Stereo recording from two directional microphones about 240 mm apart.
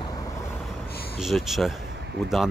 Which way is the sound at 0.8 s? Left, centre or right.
Left.